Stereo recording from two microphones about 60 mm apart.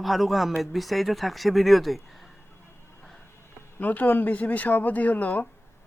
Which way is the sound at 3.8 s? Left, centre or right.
Left.